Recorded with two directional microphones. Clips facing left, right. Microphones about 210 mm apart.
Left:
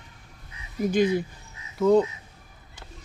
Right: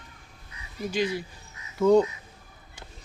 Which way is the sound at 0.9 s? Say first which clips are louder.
Left 5 dB; 50° left (ahead or behind).